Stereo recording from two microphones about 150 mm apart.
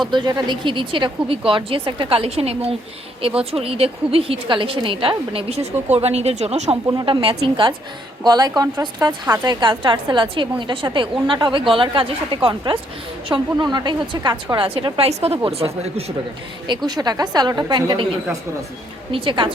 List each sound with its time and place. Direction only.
0.1 s a woman's voice: 30° right (ahead or behind); by 6.7 s 45° right (ahead or behind)
6.8 s a woman's voice: 30° right (ahead or behind)
16.6 s a woman's voice: 25° right (ahead or behind)
19.1 s a woman's voice: 35° right (ahead or behind)